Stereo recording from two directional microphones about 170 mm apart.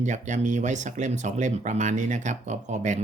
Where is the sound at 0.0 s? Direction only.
45° right (ahead or behind).